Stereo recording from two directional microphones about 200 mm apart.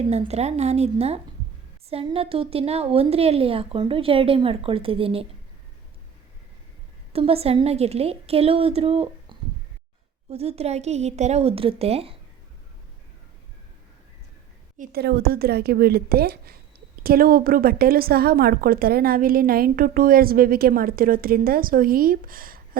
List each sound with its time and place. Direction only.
0.1 s a woman's voice: 30° right (ahead or behind)
7.1 s a woman's voice: 30° right (ahead or behind)
14.8 s a woman's voice: 55° right (ahead or behind)